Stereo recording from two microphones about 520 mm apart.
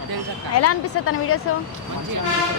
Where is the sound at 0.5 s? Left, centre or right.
Left.